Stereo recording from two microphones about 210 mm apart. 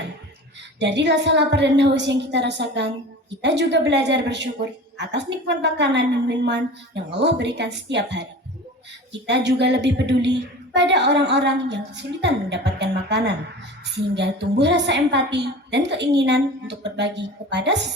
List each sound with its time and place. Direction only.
0.8 s a woman's voice: 55° right (ahead or behind)